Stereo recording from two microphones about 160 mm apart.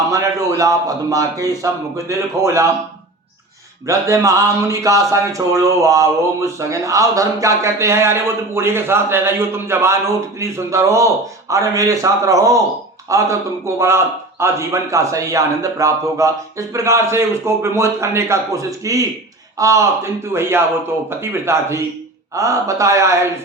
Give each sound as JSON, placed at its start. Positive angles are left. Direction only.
{"t": 0.1, "sound": "speech", "side_deg": -20}
{"t": 3.8, "sound": "a man's voice", "side_deg": -20}